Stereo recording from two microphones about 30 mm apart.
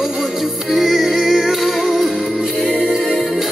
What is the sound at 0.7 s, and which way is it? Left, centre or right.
Music, centre.